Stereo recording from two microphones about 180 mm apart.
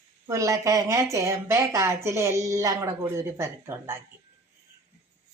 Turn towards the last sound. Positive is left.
turn(degrees=-15)  # may be behind; listen again after turning